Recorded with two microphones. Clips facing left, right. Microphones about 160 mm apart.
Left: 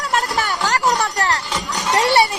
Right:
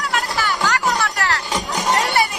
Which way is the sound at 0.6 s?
40° left (ahead or behind).